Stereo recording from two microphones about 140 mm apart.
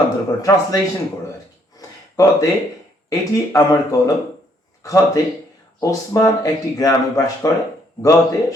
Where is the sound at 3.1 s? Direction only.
25° left (ahead or behind).